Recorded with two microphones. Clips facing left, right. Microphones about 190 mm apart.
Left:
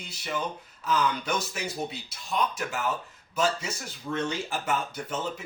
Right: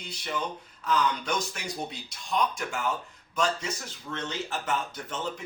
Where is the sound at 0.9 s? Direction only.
5° left (ahead or behind).